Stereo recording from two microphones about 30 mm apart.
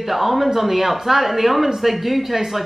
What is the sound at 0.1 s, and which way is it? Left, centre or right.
Speech, centre.